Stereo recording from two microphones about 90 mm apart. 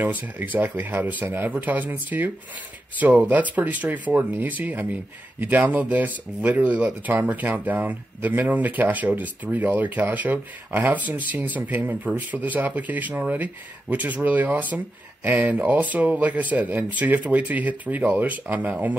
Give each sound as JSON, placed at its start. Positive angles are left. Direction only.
{"t": 0.0, "sound": "speech", "side_deg": -20}